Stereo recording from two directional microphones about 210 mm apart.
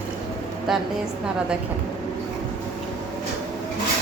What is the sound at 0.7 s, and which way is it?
Speech, centre (ahead or behind).